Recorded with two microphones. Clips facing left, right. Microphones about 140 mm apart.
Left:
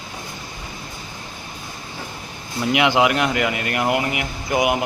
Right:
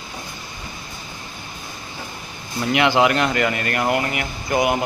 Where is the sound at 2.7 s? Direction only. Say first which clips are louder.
Right 1 dB; 10° left (ahead or behind).